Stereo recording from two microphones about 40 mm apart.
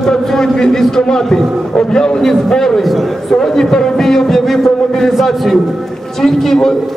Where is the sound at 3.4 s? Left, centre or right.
Centre.